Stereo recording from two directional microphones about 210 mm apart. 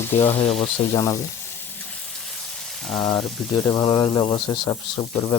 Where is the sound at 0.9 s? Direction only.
15° left (ahead or behind).